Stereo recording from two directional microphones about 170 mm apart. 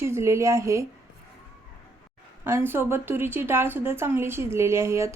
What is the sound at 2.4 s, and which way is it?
Speech, 15° right (ahead or behind).